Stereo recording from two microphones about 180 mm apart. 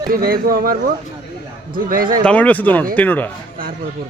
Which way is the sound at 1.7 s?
50° right (ahead or behind).